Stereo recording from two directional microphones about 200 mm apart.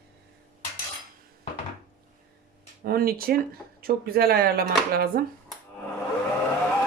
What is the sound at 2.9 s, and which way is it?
Speech, 50° right (ahead or behind).